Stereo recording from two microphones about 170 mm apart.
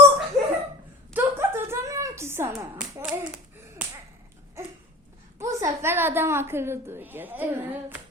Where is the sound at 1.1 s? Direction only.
15° right (ahead or behind).